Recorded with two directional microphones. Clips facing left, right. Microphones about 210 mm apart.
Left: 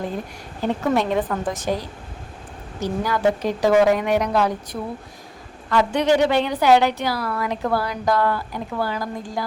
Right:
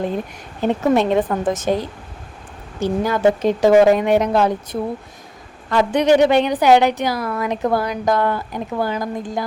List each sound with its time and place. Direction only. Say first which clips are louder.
0.6 s a woman's voice: right 4 dB; 20° right (ahead or behind)